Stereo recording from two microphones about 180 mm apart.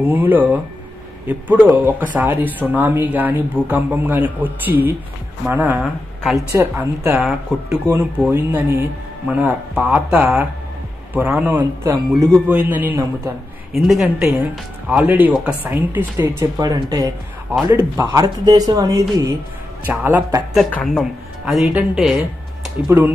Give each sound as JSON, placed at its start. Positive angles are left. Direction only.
{"t": 0.1, "sound": "speech", "side_deg": -10}
{"t": 20.5, "sound": "speech", "side_deg": 0}